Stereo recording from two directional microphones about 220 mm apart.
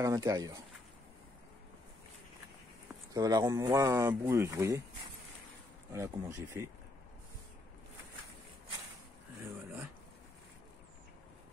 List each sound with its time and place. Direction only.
0.0 s speech: 15° right (ahead or behind)
3.1 s speech: 15° right (ahead or behind)
5.9 s speech: 15° right (ahead or behind)